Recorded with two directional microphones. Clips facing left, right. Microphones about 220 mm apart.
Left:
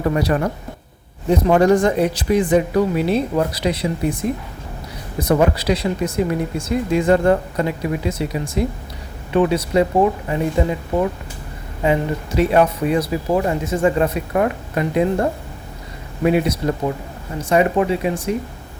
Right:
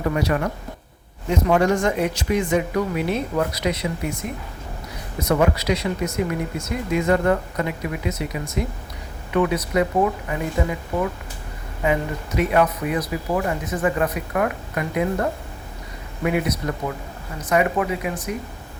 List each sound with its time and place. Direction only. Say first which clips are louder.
0.1 s speech: left 2 dB; 35° left (ahead or behind)
11.8 s speech: left 4 dB; 30° left (ahead or behind)